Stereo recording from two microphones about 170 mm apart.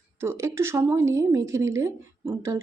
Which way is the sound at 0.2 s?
15° right (ahead or behind).